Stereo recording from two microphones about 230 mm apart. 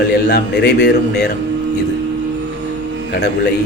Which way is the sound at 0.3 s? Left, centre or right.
Left.